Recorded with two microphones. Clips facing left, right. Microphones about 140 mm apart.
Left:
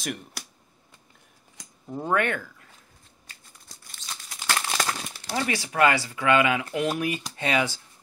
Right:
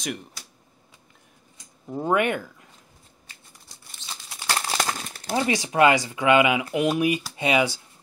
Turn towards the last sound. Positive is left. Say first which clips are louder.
# right 3 dB
turn(degrees=-15)  # may be behind; listen again after turning